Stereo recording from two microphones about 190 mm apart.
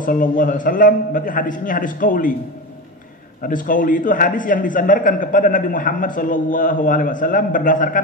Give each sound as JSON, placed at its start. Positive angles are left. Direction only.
{"t": 0.0, "sound": "a man's voice", "side_deg": 45}
{"t": 3.4, "sound": "a man's voice", "side_deg": 45}